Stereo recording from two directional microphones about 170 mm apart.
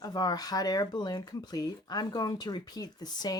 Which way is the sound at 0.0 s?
20° left (ahead or behind).